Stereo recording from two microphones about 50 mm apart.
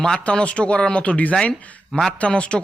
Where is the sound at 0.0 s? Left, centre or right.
Centre.